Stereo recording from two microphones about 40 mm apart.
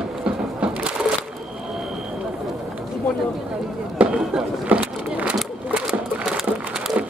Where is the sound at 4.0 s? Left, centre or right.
Right.